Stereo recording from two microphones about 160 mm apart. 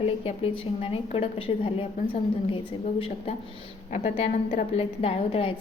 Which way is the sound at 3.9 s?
45° left (ahead or behind).